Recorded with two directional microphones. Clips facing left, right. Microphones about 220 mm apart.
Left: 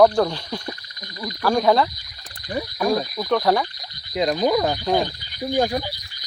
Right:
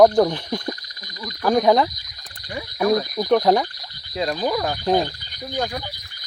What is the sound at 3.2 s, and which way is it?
Speech, 20° right (ahead or behind).